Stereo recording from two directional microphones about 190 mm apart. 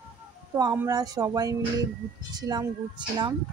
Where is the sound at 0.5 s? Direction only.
15° right (ahead or behind).